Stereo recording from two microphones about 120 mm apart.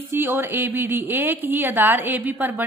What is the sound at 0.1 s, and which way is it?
A woman's voice, 20° right (ahead or behind).